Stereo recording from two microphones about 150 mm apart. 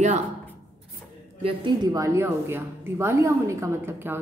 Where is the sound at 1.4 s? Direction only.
35° right (ahead or behind).